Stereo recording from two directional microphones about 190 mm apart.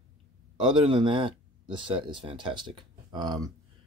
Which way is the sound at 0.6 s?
25° right (ahead or behind).